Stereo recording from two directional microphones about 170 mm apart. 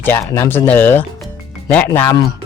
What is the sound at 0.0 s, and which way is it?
Speech, 15° left (ahead or behind).